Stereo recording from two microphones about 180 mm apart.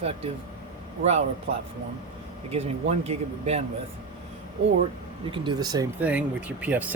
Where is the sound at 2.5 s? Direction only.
35° right (ahead or behind).